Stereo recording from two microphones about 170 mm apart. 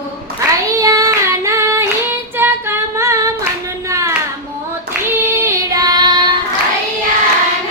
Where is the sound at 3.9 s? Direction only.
20° right (ahead or behind).